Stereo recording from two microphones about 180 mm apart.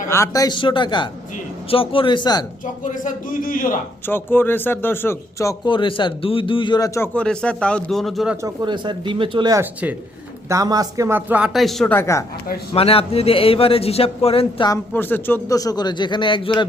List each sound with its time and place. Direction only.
0.1 s speech: 15° left (ahead or behind)
2.8 s a man's voice: 45° left (ahead or behind)
4.0 s speech: 10° left (ahead or behind)
8.4 s speech: 20° right (ahead or behind); by 12.2 s 15° left (ahead or behind)
12.7 s a man's voice: 30° left (ahead or behind)
14.7 s speech: 10° left (ahead or behind); by 16.6 s 25° left (ahead or behind)